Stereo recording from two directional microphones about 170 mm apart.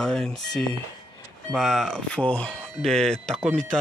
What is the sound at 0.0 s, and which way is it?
Speech, 5° left (ahead or behind).